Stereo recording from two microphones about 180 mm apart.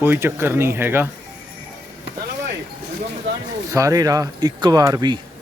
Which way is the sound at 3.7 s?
20° right (ahead or behind).